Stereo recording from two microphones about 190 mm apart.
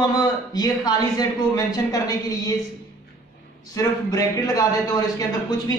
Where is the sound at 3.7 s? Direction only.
20° left (ahead or behind).